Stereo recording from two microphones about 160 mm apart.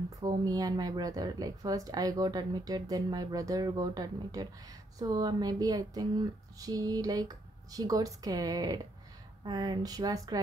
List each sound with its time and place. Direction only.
0.2 s a woman's voice: 25° right (ahead or behind)